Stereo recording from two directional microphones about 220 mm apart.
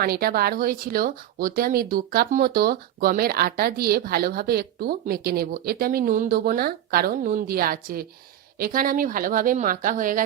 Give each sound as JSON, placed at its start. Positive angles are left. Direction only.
{"t": 0.0, "sound": "speech", "side_deg": -45}